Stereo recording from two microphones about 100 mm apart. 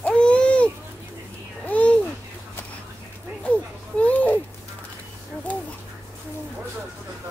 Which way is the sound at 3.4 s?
10° left (ahead or behind).